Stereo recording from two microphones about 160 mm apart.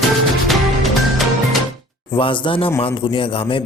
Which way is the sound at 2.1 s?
30° left (ahead or behind).